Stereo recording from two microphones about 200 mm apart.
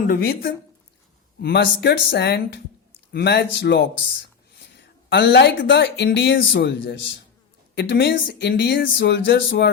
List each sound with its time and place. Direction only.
0.1 s speech: 50° left (ahead or behind)